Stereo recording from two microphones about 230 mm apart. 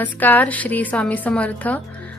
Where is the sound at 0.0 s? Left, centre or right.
Centre.